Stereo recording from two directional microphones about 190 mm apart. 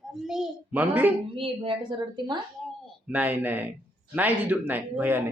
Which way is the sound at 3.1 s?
10° right (ahead or behind).